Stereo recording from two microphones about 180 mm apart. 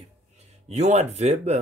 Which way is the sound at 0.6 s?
40° right (ahead or behind).